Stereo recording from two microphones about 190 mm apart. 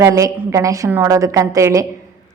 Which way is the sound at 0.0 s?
15° right (ahead or behind).